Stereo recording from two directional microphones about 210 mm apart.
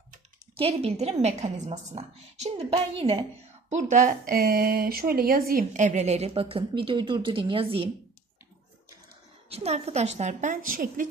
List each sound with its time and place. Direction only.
0.6 s a woman's voice: 25° right (ahead or behind)
3.7 s speech: 35° right (ahead or behind)
9.5 s speech: 30° right (ahead or behind)